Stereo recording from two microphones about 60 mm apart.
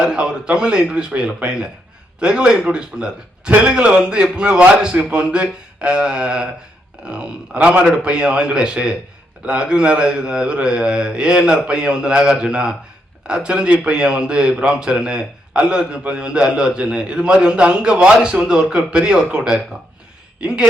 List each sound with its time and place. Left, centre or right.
0.0 s a man's voice: centre
20.4 s a man's voice: centre